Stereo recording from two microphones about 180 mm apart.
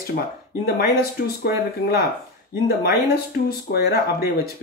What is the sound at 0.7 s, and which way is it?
Speech, 55° left (ahead or behind).